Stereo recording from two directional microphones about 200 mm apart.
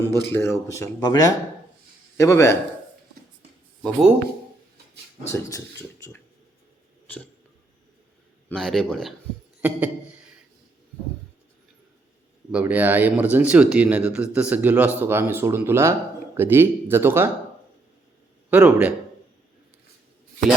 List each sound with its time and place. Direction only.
0.0 s speech: 20° right (ahead or behind)
0.3 s speech: 10° left (ahead or behind)
5.3 s speech: 15° left (ahead or behind)
8.4 s speech: 5° left (ahead or behind)
9.6 s a sound: 10° right (ahead or behind)
12.5 s speech: 5° right (ahead or behind)
18.5 s speech: 5° right (ahead or behind)